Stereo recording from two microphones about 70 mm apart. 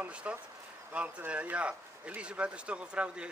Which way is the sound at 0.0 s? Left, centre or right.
Centre.